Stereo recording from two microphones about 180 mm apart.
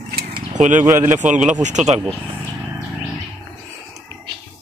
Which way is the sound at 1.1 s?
45° right (ahead or behind).